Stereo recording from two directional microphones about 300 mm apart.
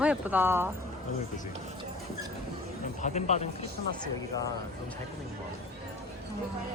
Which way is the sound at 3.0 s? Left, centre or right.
Left.